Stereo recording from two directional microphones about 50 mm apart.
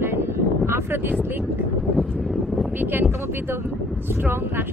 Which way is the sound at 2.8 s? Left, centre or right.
Right.